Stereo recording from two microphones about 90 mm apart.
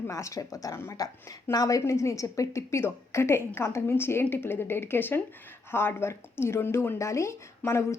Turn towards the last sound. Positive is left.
turn(degrees=30)  # may be behind; listen again after turning